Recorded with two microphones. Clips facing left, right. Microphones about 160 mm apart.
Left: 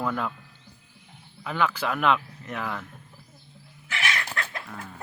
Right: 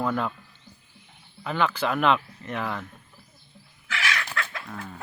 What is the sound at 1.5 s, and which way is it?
Speech, 5° left (ahead or behind).